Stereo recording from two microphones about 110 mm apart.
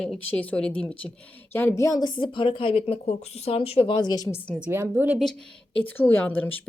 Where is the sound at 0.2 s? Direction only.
15° left (ahead or behind); by 4.3 s 40° left (ahead or behind).